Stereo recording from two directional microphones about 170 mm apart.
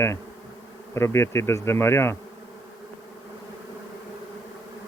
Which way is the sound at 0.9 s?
15° left (ahead or behind).